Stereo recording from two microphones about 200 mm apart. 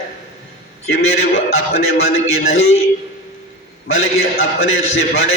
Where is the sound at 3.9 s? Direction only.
90° left.